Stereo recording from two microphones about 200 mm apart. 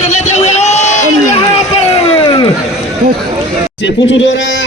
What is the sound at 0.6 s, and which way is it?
Crowd, 35° left (ahead or behind).